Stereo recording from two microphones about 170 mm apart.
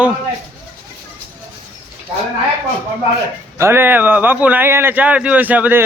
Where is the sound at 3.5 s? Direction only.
15° right (ahead or behind).